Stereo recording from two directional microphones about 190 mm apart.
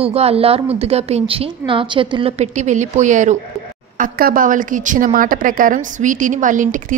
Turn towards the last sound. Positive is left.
turn(degrees=-45)  # may be behind; listen again after turning